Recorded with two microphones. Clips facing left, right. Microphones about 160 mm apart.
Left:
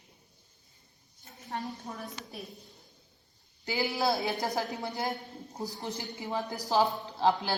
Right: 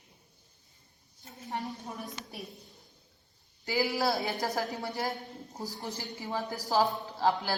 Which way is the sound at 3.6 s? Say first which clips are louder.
Right 1 dB; 20° left (ahead or behind).